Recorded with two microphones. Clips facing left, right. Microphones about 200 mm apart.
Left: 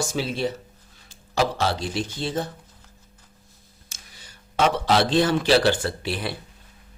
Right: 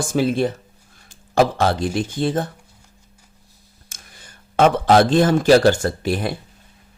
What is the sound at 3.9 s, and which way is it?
Speech, 50° right (ahead or behind).